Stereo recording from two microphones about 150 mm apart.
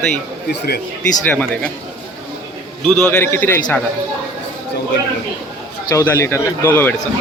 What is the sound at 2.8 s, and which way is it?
Speech, centre (ahead or behind).